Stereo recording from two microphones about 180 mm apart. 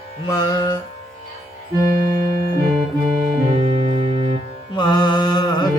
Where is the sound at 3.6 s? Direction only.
25° right (ahead or behind).